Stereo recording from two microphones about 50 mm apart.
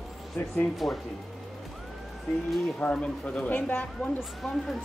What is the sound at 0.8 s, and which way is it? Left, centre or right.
Speech, centre.